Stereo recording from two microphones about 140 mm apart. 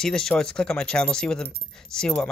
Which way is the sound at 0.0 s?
5° left (ahead or behind).